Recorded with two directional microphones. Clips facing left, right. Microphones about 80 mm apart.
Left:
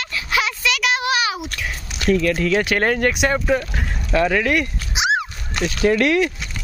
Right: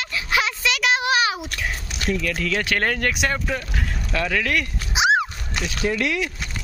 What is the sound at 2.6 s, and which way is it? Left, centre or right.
Speech, centre.